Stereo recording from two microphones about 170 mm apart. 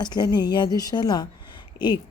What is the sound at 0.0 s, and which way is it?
Speech, 25° left (ahead or behind).